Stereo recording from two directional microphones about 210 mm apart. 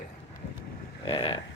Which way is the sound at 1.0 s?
25° left (ahead or behind).